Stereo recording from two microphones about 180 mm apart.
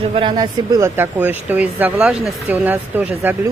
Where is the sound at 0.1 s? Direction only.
25° right (ahead or behind); by 3.3 s 10° right (ahead or behind).